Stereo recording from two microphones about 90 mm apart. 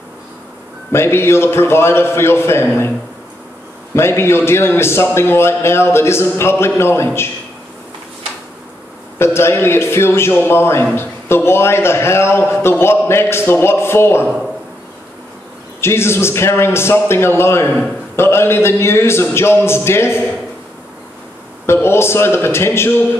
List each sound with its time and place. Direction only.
0.9 s a man's voice: 30° left (ahead or behind)
3.9 s a man's voice: 30° left (ahead or behind)
9.2 s a man's voice: 30° left (ahead or behind)
15.8 s a man's voice: 30° left (ahead or behind)
21.6 s a man's voice: 30° left (ahead or behind)